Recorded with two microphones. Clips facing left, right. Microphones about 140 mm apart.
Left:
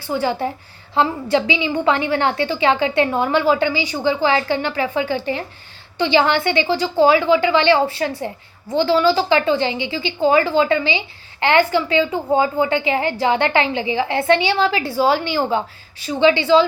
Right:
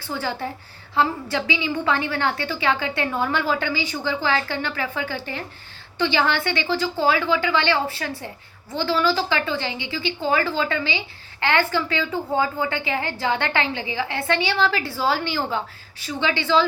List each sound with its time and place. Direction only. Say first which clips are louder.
0.1 s a woman's voice: left 7 dB; 15° left (ahead or behind)